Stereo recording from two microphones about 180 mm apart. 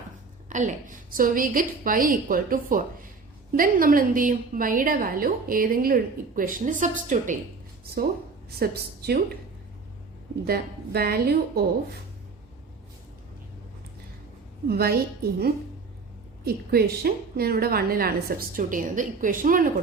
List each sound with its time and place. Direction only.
0.4 s a woman's voice: 40° right (ahead or behind)
8.5 s a woman's voice: 60° right (ahead or behind)
10.4 s a woman's voice: 55° right (ahead or behind)
14.7 s a woman's voice: 60° right (ahead or behind)
16.5 s a woman's voice: 60° right (ahead or behind)